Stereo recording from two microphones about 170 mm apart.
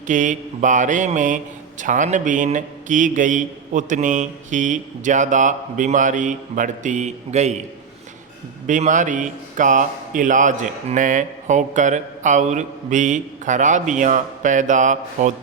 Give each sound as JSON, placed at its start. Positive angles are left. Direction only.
{"t": 0.1, "sound": "a man's voice", "side_deg": -50}
{"t": 8.6, "sound": "a man's voice", "side_deg": -45}